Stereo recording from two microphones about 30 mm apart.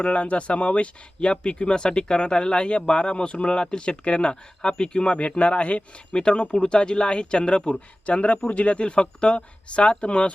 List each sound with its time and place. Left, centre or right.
0.0 s speech: left
6.1 s speech: left